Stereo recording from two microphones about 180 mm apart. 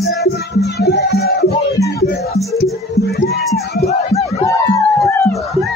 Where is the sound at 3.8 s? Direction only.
35° left (ahead or behind).